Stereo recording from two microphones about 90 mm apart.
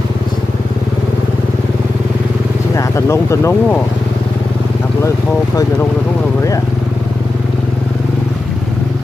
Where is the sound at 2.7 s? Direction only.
35° left (ahead or behind).